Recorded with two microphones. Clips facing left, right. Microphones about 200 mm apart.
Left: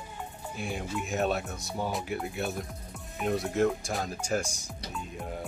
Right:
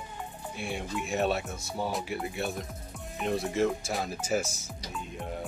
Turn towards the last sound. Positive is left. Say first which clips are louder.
# even
turn(degrees=0)  # may be behind; listen again after turning